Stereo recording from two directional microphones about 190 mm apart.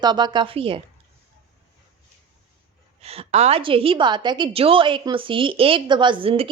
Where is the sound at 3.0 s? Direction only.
30° right (ahead or behind).